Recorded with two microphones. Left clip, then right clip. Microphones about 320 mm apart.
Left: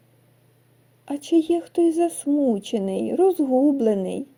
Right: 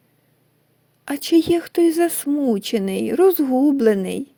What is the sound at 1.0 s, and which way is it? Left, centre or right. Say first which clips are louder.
Speech: right 4 dB; right.